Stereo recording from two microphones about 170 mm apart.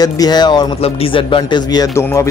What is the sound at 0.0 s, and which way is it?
Speech, 25° left (ahead or behind).